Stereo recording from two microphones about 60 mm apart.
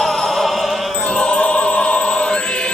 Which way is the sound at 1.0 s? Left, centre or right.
Centre.